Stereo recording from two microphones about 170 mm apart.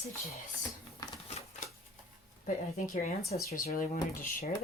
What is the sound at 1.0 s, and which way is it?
Typewriter, 20° left (ahead or behind).